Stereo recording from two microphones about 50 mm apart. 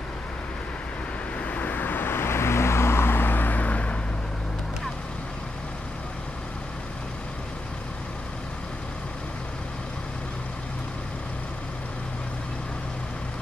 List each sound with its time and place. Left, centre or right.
1.4 s vehicle: left